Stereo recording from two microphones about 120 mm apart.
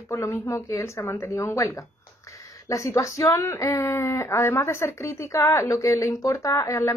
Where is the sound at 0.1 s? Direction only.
25° left (ahead or behind).